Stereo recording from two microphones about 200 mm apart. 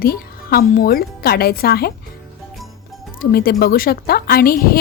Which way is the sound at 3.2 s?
50° left (ahead or behind).